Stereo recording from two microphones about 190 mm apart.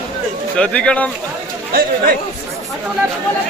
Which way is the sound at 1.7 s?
50° right (ahead or behind).